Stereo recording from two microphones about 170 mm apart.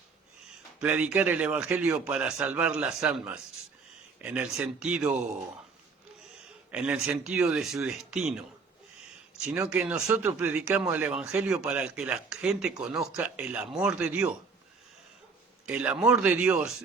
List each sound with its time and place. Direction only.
0.8 s a man's voice: 10° right (ahead or behind)
6.7 s speech: 5° right (ahead or behind)
9.5 s a man's voice: 10° right (ahead or behind)
15.6 s a man's voice: 10° right (ahead or behind)